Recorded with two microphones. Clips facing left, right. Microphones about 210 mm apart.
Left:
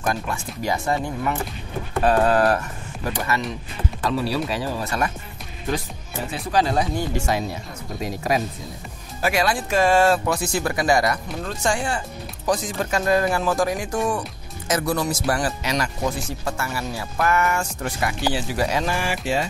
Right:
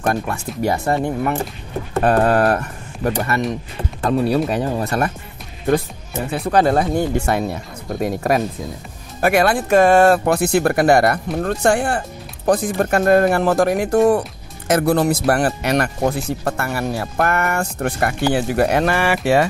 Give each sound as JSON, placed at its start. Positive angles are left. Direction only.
{"t": 0.0, "sound": "speech", "side_deg": -55}
{"t": 6.3, "sound": "speech", "side_deg": -55}